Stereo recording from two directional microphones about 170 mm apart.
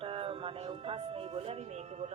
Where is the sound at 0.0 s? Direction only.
30° right (ahead or behind).